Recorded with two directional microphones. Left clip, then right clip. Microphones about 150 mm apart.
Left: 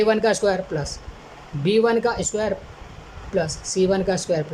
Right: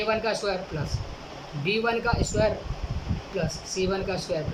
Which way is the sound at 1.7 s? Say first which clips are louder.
Left 7 dB; 40° left (ahead or behind).